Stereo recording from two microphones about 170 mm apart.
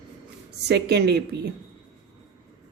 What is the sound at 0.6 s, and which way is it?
Speech, 75° right (ahead or behind).